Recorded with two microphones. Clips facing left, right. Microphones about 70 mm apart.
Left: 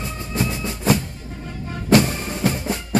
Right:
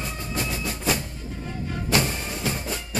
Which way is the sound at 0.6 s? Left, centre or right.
Left.